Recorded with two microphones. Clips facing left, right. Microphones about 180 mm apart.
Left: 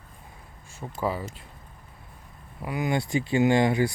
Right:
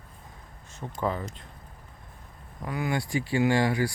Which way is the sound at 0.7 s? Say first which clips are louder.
Left 1 dB; 10° left (ahead or behind).